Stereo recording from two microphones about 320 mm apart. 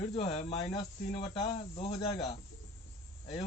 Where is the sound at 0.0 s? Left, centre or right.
Centre.